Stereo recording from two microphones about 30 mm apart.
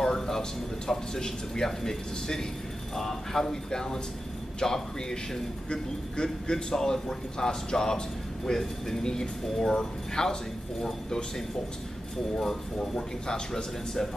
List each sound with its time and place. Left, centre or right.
0.0 s a man's voice: centre
12.7 s a man's voice: left